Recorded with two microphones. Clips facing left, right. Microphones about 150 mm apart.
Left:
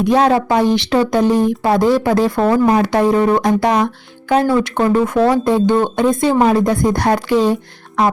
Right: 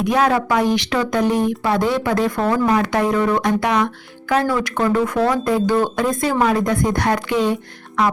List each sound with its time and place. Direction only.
0.0 s speech: 30° left (ahead or behind)